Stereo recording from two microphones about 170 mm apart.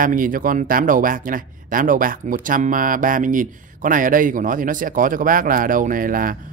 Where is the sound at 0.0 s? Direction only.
55° right (ahead or behind).